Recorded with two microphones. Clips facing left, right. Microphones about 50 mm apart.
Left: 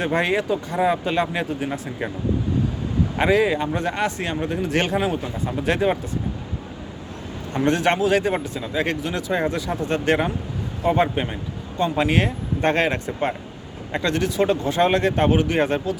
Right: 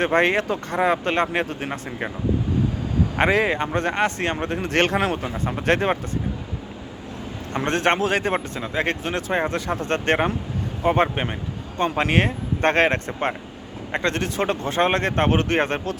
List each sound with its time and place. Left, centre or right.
0.0 s speech: right
3.2 s speech: right
5.5 s speech: right
7.5 s speech: right